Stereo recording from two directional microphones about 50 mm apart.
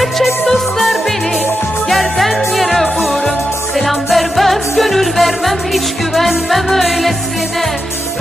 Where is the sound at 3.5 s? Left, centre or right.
Left.